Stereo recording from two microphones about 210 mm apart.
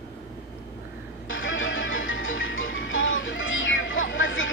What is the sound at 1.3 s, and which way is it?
Music, 65° left (ahead or behind).